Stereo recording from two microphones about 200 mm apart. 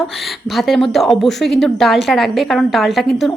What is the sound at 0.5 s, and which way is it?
A woman's voice, centre (ahead or behind).